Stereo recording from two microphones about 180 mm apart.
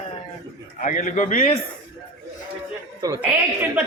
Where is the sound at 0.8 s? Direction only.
45° left (ahead or behind).